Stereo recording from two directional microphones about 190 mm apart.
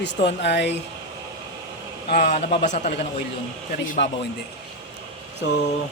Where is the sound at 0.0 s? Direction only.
65° left (ahead or behind).